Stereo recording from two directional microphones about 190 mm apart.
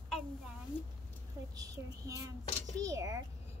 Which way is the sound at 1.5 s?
20° right (ahead or behind).